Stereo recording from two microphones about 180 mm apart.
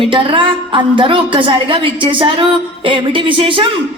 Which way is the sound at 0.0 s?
30° right (ahead or behind).